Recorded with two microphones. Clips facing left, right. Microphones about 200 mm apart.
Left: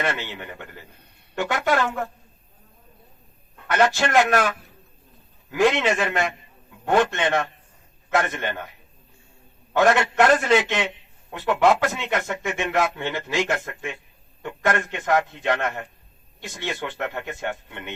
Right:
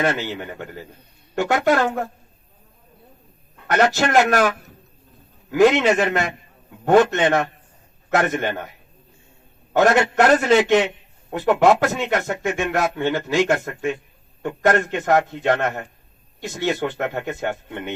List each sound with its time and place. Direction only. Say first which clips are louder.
0.0 s a man's voice: right 5 dB; 40° right (ahead or behind)
3.7 s a man's voice: right 2 dB; 40° right (ahead or behind)
9.7 s a man's voice: right 2 dB; 40° right (ahead or behind)